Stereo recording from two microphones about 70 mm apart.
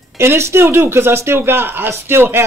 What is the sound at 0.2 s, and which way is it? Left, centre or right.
Speech, right.